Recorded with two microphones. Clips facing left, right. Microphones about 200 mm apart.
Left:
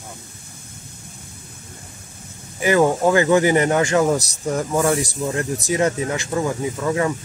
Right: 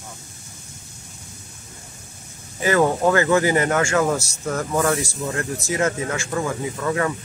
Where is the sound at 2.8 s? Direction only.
10° left (ahead or behind).